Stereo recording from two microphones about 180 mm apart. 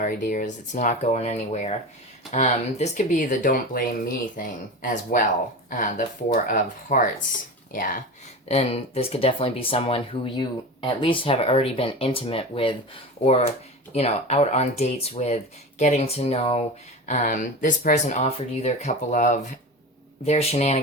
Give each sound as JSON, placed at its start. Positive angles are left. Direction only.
{"t": 0.0, "sound": "speech", "side_deg": 45}
{"t": 8.4, "sound": "speech", "side_deg": 35}
{"t": 17.1, "sound": "speech", "side_deg": 45}